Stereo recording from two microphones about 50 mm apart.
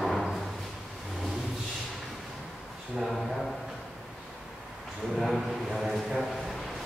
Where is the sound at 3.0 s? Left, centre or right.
Centre.